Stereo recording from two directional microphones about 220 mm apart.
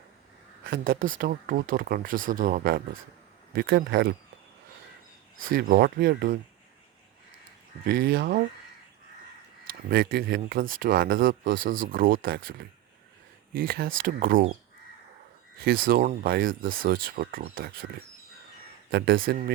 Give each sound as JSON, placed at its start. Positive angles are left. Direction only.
{"t": 0.6, "sound": "speech", "side_deg": -40}
{"t": 5.5, "sound": "speech", "side_deg": -40}
{"t": 7.9, "sound": "speech", "side_deg": -45}
{"t": 9.9, "sound": "speech", "side_deg": -45}
{"t": 15.5, "sound": "speech", "side_deg": -45}
{"t": 18.9, "sound": "speech", "side_deg": -45}